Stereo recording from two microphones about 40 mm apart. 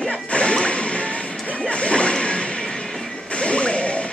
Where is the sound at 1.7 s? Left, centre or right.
Left.